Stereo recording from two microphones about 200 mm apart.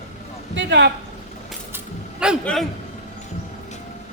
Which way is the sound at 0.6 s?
60° right (ahead or behind).